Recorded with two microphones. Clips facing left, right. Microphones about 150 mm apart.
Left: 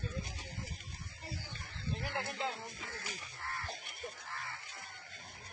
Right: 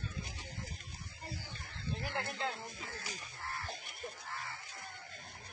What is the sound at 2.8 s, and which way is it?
Music, 30° right (ahead or behind).